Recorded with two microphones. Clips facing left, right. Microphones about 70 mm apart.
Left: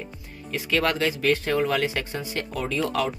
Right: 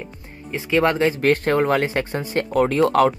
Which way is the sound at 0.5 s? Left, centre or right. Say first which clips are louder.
Right 5 dB; right.